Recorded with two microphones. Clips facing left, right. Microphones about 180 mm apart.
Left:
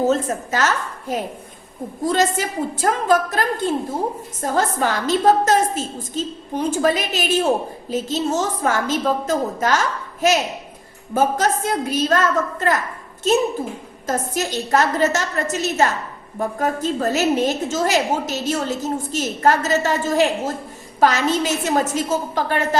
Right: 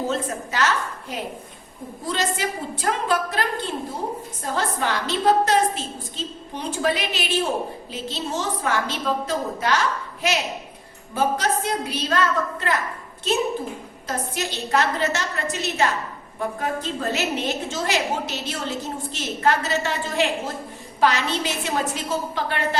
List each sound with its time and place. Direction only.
0.1 s a woman's voice: 45° left (ahead or behind)